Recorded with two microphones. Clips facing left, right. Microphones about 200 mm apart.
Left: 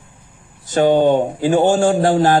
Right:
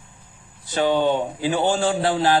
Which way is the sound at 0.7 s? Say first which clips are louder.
Left 6 dB; 45° left (ahead or behind).